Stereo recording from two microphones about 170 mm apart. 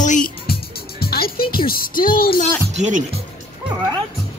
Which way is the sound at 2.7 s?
45° right (ahead or behind).